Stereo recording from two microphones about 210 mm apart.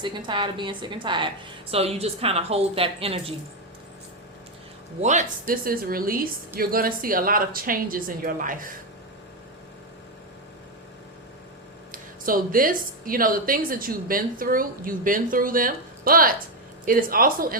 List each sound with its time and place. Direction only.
0.0 s a woman's voice: 20° right (ahead or behind)
4.9 s speech: 35° right (ahead or behind)
11.9 s speech: 40° right (ahead or behind)